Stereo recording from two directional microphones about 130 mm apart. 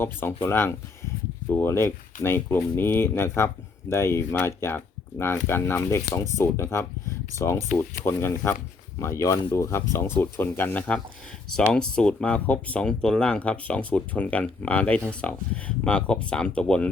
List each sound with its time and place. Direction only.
0.0 s speech: 15° left (ahead or behind)